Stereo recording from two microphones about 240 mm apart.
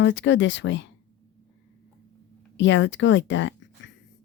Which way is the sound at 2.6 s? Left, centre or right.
Left.